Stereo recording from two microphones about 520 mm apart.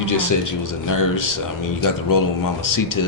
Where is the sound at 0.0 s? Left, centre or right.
Left.